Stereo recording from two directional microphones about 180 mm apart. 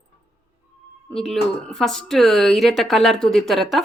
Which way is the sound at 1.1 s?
5° left (ahead or behind).